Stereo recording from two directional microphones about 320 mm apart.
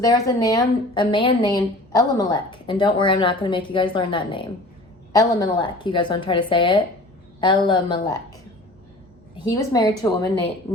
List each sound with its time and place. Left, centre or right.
0.0 s a woman's voice: centre
9.5 s a woman's voice: centre